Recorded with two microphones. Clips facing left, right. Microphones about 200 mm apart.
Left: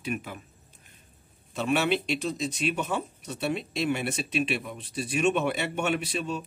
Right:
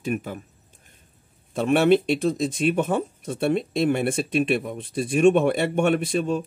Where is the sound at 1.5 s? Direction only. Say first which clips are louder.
Right 8 dB; 50° right (ahead or behind).